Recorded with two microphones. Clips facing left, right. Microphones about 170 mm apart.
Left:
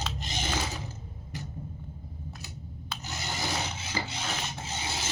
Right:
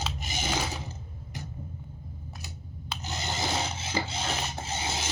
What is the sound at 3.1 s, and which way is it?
Rub, 20° right (ahead or behind).